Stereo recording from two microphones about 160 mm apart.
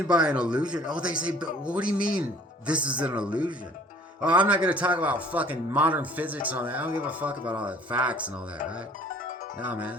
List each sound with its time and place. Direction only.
0.1 s a man's voice: 5° right (ahead or behind)
1.1 s a man's voice: 60° left (ahead or behind)
1.4 s a man's voice: 5° right (ahead or behind)
1.9 s a man's voice: 60° left (ahead or behind)
2.6 s a man's voice: 5° right (ahead or behind)
9.6 s a man's voice: 10° right (ahead or behind)